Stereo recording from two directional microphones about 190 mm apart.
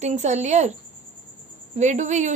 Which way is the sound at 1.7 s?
40° right (ahead or behind).